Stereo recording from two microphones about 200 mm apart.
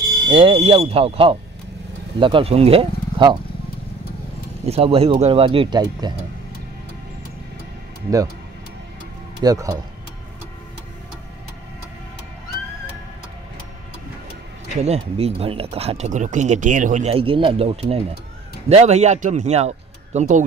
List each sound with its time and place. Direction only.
0.3 s speech: 25° right (ahead or behind)
4.6 s speech: 30° right (ahead or behind)
9.4 s speech: 20° right (ahead or behind)
14.8 s speech: 30° right (ahead or behind)